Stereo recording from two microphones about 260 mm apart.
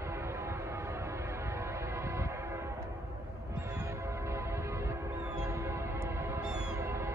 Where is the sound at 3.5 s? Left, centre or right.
Centre.